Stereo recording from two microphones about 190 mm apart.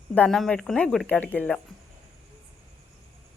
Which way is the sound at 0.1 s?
5° left (ahead or behind).